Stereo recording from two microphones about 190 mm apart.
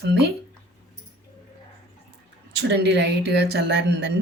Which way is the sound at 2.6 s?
60° right (ahead or behind).